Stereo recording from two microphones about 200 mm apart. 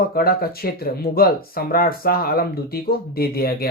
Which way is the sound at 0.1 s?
50° left (ahead or behind).